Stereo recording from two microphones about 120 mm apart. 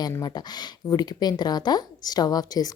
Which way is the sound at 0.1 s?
35° left (ahead or behind).